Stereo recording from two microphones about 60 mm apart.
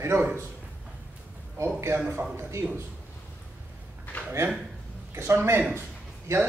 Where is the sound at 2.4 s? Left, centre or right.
Right.